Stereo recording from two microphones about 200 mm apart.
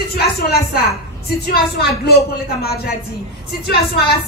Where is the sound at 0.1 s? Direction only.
50° left (ahead or behind).